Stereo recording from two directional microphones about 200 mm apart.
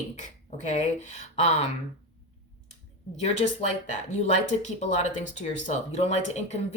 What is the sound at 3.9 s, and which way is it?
Speech, 35° left (ahead or behind).